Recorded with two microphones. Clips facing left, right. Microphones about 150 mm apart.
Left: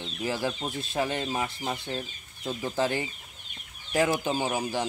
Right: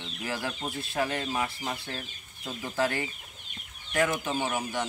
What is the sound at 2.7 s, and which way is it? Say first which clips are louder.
Speech: even; 25° left (ahead or behind).